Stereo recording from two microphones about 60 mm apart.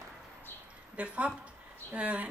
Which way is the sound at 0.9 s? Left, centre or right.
Right.